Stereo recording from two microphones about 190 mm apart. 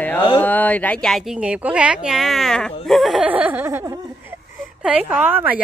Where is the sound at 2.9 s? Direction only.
Centre (ahead or behind).